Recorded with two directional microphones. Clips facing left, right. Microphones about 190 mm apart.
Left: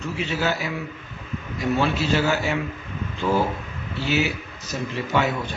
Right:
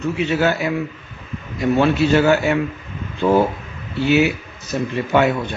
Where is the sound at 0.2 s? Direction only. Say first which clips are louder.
Right 6 dB; 60° right (ahead or behind).